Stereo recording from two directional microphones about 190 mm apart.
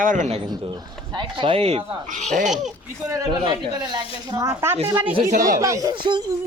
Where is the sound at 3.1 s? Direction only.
20° right (ahead or behind).